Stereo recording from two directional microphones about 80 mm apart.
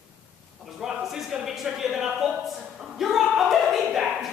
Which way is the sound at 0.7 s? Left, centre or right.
Centre.